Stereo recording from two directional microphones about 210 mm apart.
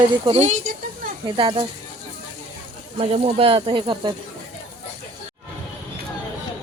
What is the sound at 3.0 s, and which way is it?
Speech, 25° right (ahead or behind).